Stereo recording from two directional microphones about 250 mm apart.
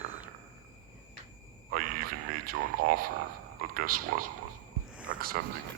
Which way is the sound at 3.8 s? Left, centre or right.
Right.